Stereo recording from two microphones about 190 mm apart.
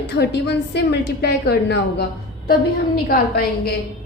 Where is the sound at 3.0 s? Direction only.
50° left (ahead or behind).